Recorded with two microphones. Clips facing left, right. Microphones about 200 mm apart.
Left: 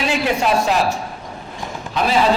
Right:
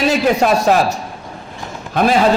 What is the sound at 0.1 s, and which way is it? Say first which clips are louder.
A man's voice: right 2 dB; 40° right (ahead or behind).